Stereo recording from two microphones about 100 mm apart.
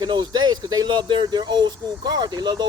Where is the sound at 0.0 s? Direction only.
45° right (ahead or behind).